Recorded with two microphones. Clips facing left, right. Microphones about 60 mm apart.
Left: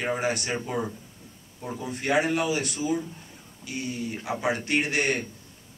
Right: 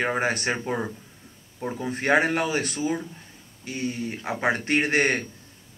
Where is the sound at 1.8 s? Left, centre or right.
Right.